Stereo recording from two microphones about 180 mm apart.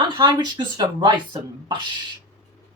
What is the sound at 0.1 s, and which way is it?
Speech, 25° right (ahead or behind).